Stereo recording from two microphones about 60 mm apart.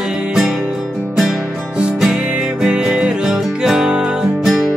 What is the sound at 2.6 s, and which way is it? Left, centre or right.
Music, centre.